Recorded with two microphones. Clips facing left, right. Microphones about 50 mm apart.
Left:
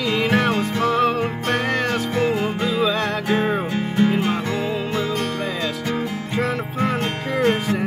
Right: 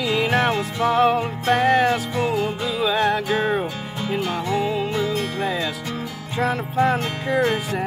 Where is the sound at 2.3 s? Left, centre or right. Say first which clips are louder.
Left 1 dB; left.